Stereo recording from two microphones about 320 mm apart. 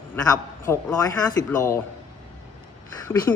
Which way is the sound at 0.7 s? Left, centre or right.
Centre.